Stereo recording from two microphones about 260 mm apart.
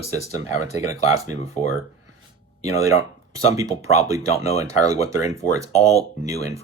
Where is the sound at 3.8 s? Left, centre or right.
Centre.